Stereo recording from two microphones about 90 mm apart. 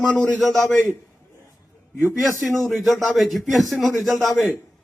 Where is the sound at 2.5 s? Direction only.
Centre (ahead or behind).